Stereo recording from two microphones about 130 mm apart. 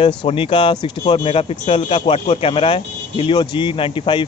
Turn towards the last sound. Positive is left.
turn(degrees=40)  # may be behind; listen again after turning